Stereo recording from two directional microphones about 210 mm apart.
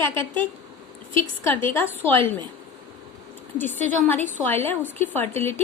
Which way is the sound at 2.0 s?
10° left (ahead or behind).